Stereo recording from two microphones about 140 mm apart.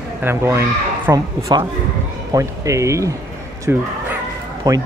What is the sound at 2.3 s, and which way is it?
Speech, 20° right (ahead or behind).